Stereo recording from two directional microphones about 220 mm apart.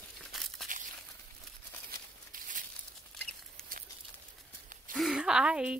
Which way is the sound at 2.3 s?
35° right (ahead or behind).